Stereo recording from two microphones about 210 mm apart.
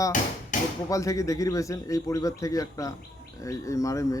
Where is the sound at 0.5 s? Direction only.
35° left (ahead or behind).